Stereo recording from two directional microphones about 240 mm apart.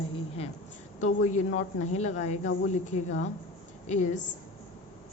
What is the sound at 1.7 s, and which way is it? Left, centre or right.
A woman's voice, left.